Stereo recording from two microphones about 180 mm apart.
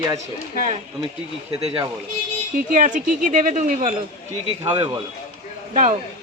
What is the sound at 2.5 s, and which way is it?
Speech, 45° right (ahead or behind).